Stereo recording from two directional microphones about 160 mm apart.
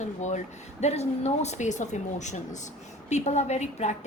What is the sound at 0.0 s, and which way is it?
A woman's voice, 50° left (ahead or behind).